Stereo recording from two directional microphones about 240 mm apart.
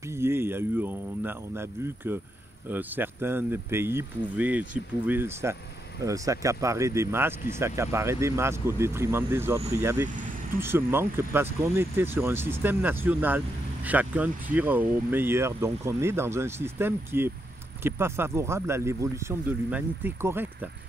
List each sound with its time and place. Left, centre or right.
0.1 s speech: centre
10.0 s speech: right
10.6 s speech: centre